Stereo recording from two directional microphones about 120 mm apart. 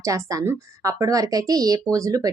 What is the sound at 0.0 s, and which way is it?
Speech, 30° right (ahead or behind).